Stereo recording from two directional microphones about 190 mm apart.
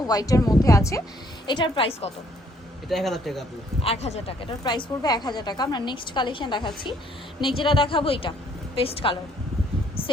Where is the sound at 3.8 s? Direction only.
30° left (ahead or behind).